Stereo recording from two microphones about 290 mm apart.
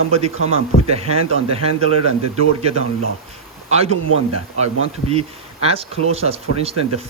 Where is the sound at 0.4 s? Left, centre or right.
Right.